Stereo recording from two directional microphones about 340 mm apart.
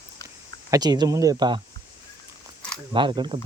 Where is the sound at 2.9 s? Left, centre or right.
Centre.